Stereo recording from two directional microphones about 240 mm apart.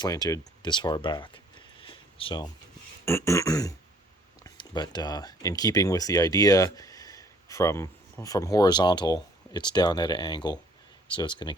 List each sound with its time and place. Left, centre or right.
0.0 s speech: centre
3.1 s a sound: centre
4.4 s speech: centre